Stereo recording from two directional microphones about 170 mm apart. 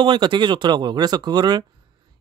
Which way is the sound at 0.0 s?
30° right (ahead or behind).